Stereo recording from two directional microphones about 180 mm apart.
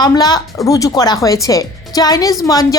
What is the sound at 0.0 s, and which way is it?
A woman's voice, 20° left (ahead or behind).